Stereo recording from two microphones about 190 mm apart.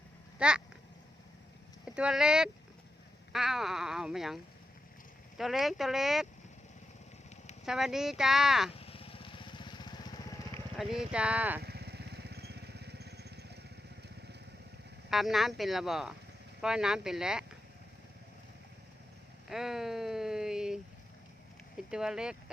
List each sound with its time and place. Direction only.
0.3 s speech: 5° right (ahead or behind)
2.0 s speech: 5° right (ahead or behind)
5.4 s speech: centre (ahead or behind)
7.6 s speech: 5° right (ahead or behind)
8.8 s lawn mower: 30° left (ahead or behind)
10.8 s speech: centre (ahead or behind)
11.6 s vehicle: 60° right (ahead or behind)
15.1 s speech: centre (ahead or behind)
19.5 s a sound: centre (ahead or behind)
21.8 s speech: 5° right (ahead or behind)